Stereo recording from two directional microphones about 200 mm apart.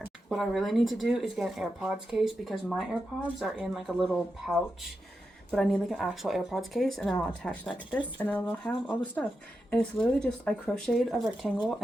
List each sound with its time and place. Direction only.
0.3 s speech: centre (ahead or behind)